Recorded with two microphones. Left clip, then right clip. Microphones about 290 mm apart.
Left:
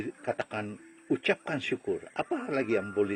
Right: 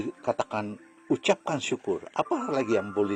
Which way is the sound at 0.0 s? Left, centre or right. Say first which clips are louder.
Right 5 dB; right.